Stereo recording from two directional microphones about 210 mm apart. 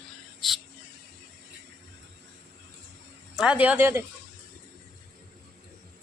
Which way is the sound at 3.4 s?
5° right (ahead or behind).